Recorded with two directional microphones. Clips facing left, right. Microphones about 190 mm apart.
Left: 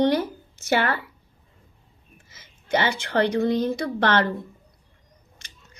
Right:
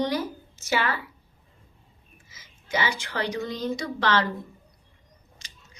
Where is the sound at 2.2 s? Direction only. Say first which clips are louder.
Left 8 dB; 60° left (ahead or behind).